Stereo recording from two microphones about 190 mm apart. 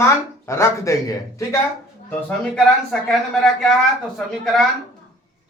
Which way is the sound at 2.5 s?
Centre (ahead or behind).